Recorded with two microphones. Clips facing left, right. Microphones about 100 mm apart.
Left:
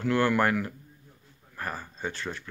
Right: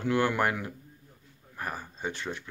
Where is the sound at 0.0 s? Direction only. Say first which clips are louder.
Left 2 dB; 15° right (ahead or behind).